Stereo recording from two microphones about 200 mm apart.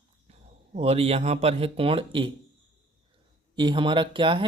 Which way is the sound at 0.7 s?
30° right (ahead or behind).